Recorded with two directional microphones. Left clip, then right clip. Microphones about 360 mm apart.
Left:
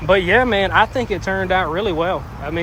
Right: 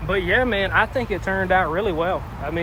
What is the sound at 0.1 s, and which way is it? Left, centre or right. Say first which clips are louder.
Speech: left 6 dB; centre.